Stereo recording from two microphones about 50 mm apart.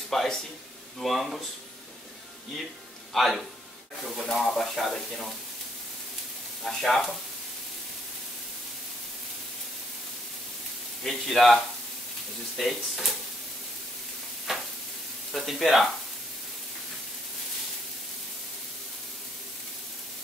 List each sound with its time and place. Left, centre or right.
0.1 s speech: centre
1.0 s sizzle: centre
3.1 s speech: centre
4.2 s sizzle: centre
6.6 s sizzle: centre
11.1 s sizzle: centre
14.5 s sizzle: centre